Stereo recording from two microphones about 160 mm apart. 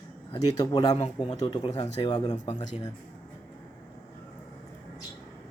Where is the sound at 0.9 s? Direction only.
35° left (ahead or behind).